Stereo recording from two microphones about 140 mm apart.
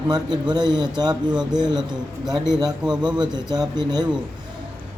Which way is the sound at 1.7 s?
30° right (ahead or behind).